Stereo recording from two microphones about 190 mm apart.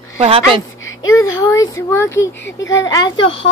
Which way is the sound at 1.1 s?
15° left (ahead or behind).